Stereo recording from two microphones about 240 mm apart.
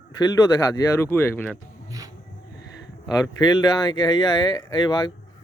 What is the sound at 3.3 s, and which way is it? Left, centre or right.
Speech, centre.